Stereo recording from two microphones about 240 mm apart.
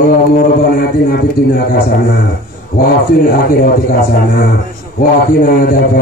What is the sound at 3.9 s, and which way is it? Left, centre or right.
A man's voice, left.